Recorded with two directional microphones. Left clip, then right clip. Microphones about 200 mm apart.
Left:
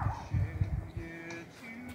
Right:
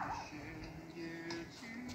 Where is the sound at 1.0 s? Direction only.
20° left (ahead or behind).